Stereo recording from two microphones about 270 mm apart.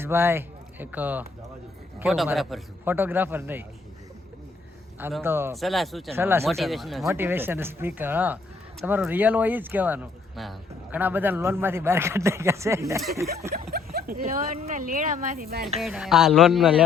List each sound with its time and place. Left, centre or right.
0.0 s speech: centre
4.9 s speech: centre
13.5 s speech: right
15.8 s speech: centre